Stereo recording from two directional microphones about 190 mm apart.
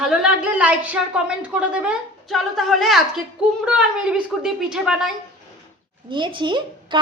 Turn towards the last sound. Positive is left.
turn(degrees=-25)  # may be behind; listen again after turning